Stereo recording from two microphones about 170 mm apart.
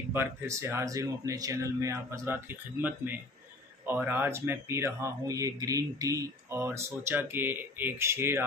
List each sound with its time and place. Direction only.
0.1 s speech: 15° right (ahead or behind)